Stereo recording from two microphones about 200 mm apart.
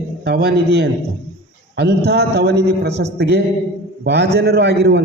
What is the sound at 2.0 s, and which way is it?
A man's voice, 55° right (ahead or behind).